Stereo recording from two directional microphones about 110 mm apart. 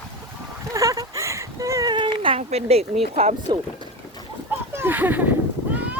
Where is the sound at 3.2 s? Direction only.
60° right (ahead or behind).